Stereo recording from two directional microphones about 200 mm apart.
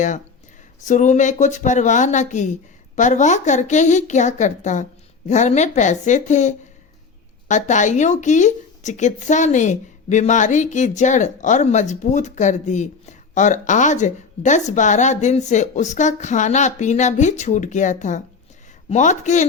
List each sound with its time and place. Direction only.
0.9 s speech: 35° left (ahead or behind)